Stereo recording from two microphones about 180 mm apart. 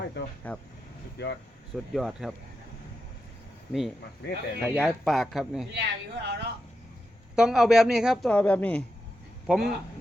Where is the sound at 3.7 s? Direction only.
Centre (ahead or behind).